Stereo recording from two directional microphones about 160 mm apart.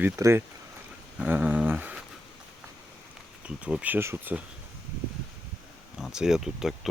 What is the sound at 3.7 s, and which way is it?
Speech, 10° right (ahead or behind).